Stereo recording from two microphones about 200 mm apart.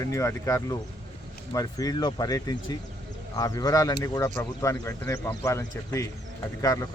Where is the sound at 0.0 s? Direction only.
15° left (ahead or behind).